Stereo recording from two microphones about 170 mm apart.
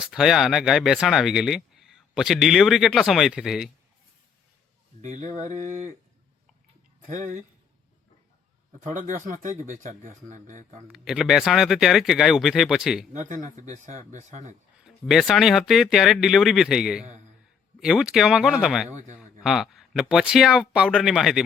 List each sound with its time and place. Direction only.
0.0 s speech: centre (ahead or behind)
5.0 s speech: 50° right (ahead or behind)
7.0 s speech: 50° right (ahead or behind)
8.8 s speech: 50° right (ahead or behind)
10.8 s speech: 5° right (ahead or behind)
13.1 s speech: 45° right (ahead or behind)
14.8 s speech: centre (ahead or behind)
17.0 s speech: 45° right (ahead or behind)
17.7 s speech: 5° right (ahead or behind)